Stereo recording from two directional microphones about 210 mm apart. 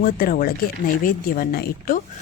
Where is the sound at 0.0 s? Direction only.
45° left (ahead or behind).